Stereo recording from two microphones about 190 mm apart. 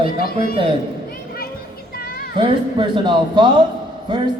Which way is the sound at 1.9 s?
50° left (ahead or behind).